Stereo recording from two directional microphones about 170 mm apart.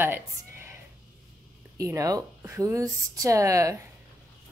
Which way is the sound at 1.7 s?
20° right (ahead or behind).